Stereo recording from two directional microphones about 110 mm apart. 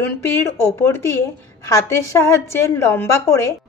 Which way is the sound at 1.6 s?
25° left (ahead or behind).